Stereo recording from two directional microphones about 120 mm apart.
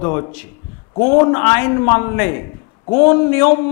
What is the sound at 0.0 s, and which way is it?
A man's voice, 30° left (ahead or behind).